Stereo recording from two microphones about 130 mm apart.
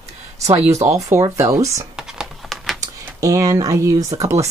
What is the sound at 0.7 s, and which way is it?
A woman's voice, 25° right (ahead or behind).